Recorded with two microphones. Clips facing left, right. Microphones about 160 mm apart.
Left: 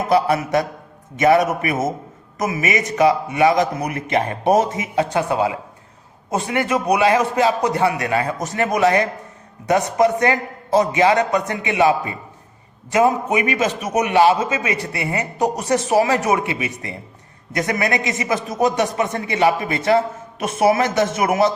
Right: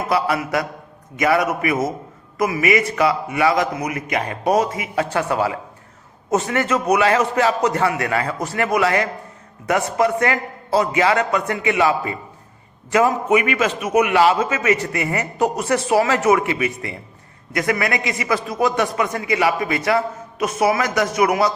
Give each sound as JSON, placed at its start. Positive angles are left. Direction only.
{"t": 0.1, "sound": "a man's voice", "side_deg": 25}
{"t": 1.6, "sound": "a man's voice", "side_deg": 25}